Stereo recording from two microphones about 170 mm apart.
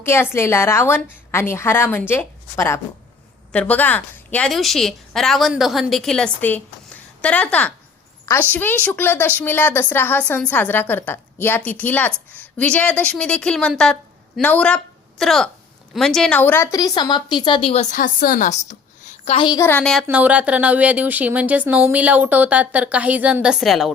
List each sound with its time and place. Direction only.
0.0 s a woman's voice: 15° left (ahead or behind); by 17.8 s 35° left (ahead or behind)
17.9 s a woman's voice: 55° left (ahead or behind)
19.5 s a woman's voice: 15° left (ahead or behind)
19.9 s speech: 5° right (ahead or behind)